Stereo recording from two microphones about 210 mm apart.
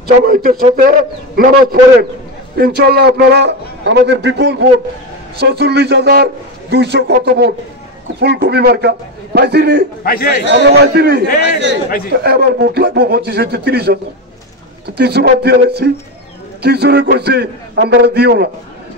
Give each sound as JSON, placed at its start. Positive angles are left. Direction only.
{"t": 0.0, "sound": "a man's voice", "side_deg": -45}
{"t": 10.0, "sound": "a man's voice", "side_deg": 45}
{"t": 10.4, "sound": "a man's voice", "side_deg": -55}